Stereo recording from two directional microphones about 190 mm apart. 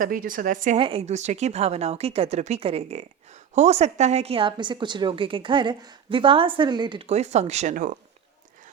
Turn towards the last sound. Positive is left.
turn(degrees=-40)  # may be behind; listen again after turning